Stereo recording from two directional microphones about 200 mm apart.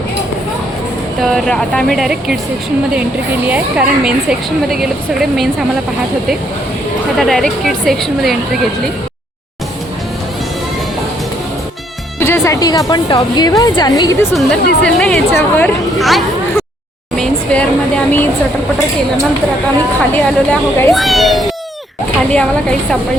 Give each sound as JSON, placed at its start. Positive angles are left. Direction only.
{"t": 1.2, "sound": "a woman's voice", "side_deg": 5}
{"t": 3.5, "sound": "a woman's voice", "side_deg": -5}
{"t": 7.2, "sound": "a woman's voice", "side_deg": 0}
{"t": 12.2, "sound": "music", "side_deg": 15}
{"t": 12.9, "sound": "a woman's voice", "side_deg": 20}
{"t": 14.3, "sound": "a woman's voice", "side_deg": 0}
{"t": 20.0, "sound": "a woman's voice", "side_deg": 5}